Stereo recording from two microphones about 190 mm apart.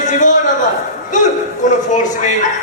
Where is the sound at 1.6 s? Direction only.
40° left (ahead or behind).